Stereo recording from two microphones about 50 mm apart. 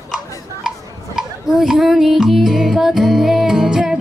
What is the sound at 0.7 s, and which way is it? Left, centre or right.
Music, centre.